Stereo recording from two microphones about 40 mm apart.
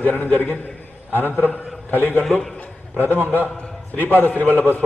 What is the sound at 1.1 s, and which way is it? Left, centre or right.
A man's voice, left.